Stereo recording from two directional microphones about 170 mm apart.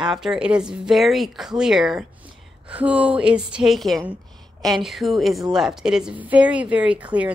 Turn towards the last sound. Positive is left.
turn(degrees=-10)  # may be behind; listen again after turning